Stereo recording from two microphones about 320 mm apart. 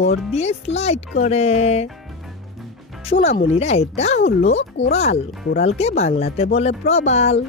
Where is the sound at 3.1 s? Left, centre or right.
Centre.